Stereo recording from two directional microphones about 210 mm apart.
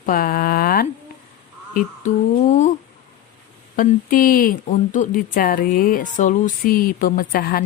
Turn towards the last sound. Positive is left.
turn(degrees=45)  # may be behind; listen again after turning